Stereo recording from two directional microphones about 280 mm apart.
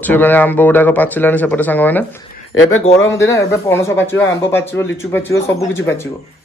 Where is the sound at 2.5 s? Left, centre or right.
Left.